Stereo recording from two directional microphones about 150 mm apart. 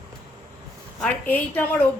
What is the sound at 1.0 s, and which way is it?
Speech, 10° left (ahead or behind).